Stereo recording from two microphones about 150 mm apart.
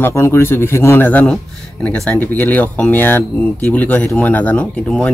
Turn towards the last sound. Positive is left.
turn(degrees=5)  # may be behind; listen again after turning